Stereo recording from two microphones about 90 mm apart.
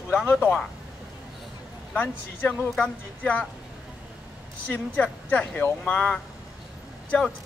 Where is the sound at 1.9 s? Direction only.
20° left (ahead or behind).